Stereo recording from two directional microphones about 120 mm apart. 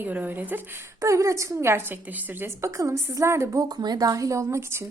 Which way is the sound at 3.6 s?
35° right (ahead or behind).